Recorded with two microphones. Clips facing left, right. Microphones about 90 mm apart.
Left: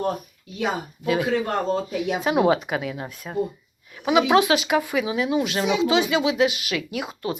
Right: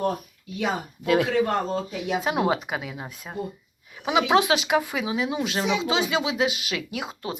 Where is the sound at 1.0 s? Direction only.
65° right (ahead or behind).